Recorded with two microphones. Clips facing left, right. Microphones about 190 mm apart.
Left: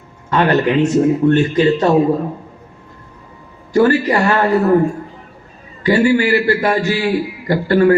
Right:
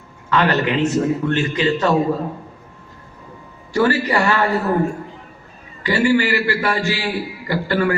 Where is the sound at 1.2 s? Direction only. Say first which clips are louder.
Left 7 dB; 35° left (ahead or behind).